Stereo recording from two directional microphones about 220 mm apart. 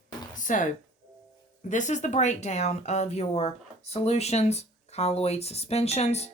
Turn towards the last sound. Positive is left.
turn(degrees=30)  # may be behind; listen again after turning